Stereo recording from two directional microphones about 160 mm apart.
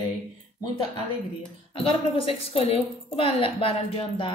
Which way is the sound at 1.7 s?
35° left (ahead or behind).